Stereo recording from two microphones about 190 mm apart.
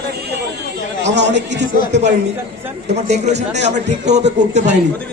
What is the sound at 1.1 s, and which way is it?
Speech, 65° right (ahead or behind).